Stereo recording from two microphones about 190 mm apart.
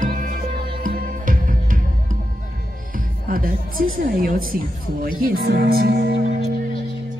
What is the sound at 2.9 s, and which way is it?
A woman's voice, 50° right (ahead or behind).